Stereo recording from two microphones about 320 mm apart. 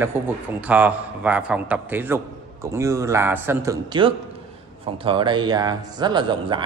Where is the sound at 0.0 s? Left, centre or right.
Centre.